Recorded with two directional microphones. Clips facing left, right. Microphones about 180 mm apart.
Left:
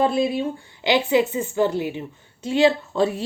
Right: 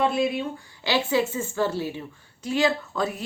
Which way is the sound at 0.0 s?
35° left (ahead or behind).